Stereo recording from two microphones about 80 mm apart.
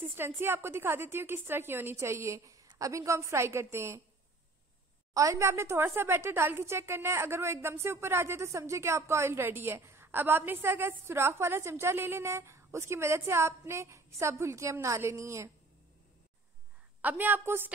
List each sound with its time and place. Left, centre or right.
0.0 s speech: right
5.1 s speech: right
17.0 s a woman's voice: right